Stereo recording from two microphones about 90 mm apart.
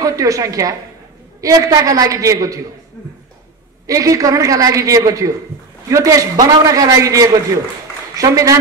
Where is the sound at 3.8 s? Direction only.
40° right (ahead or behind).